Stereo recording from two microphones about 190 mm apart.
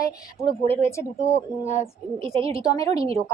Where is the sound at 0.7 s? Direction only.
15° left (ahead or behind).